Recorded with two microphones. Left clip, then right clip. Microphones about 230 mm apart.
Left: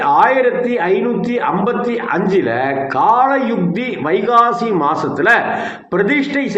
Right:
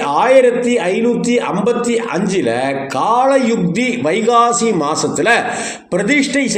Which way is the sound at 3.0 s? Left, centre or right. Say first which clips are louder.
Even; right.